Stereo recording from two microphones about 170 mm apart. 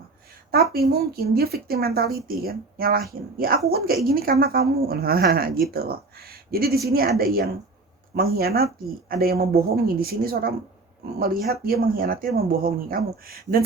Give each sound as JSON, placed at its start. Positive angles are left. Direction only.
{"t": 0.7, "sound": "a woman's voice", "side_deg": -65}